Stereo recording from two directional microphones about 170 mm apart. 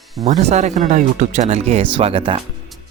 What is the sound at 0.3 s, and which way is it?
Speech, 40° right (ahead or behind).